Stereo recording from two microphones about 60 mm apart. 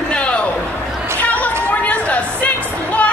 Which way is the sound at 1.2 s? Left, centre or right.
Left.